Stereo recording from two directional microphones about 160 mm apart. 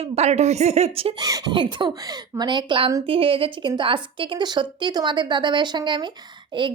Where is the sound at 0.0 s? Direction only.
45° right (ahead or behind).